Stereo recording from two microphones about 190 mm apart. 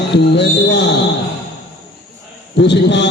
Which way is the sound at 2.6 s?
65° left (ahead or behind).